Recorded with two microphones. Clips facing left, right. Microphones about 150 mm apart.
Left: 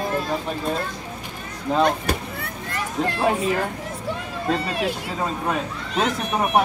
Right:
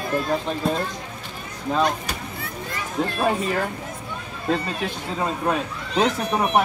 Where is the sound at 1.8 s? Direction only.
55° left (ahead or behind).